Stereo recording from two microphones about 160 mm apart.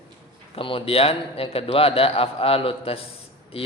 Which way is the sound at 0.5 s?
35° left (ahead or behind).